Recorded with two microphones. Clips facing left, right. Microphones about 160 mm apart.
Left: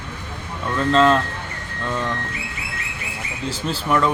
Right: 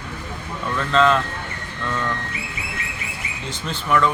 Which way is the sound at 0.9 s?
35° left (ahead or behind).